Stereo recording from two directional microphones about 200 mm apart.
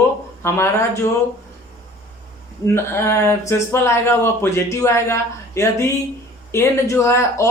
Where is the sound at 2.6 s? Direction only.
10° left (ahead or behind).